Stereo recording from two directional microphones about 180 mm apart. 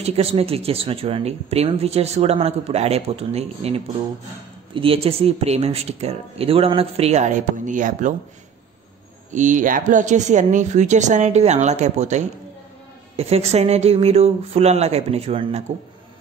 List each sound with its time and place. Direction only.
0.0 s speech: 35° right (ahead or behind)
9.3 s speech: 45° right (ahead or behind)